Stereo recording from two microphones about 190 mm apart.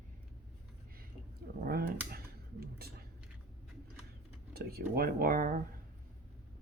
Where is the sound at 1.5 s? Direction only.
55° right (ahead or behind).